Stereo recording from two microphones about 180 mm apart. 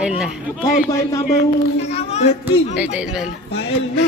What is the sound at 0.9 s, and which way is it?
Speech, 15° left (ahead or behind).